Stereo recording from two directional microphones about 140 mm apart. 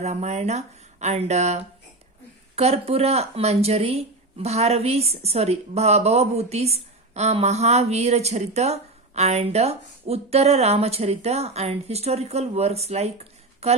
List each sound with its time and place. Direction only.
0.0 s speech: 55° right (ahead or behind)